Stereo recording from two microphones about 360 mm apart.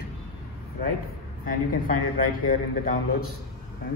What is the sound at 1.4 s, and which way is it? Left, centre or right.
A man's voice, left.